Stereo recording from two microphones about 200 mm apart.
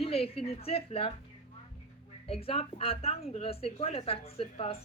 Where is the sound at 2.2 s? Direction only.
30° left (ahead or behind).